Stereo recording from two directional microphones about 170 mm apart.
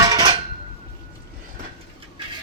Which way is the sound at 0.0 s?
25° right (ahead or behind).